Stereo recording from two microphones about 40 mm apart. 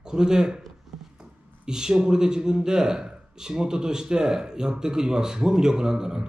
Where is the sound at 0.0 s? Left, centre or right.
Centre.